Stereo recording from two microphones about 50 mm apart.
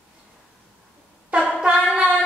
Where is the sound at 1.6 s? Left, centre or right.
Centre.